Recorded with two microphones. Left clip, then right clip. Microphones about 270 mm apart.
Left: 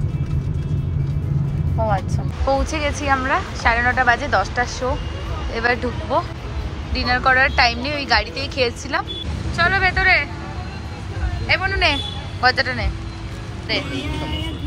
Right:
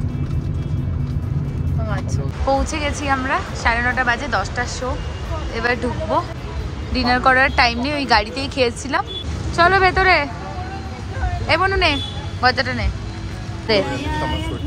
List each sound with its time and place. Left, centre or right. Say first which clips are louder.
2.7 s a woman's voice: left 1 dB; centre
11.4 s a man's voice: right 1 dB; centre
13.7 s speech: right 6 dB; right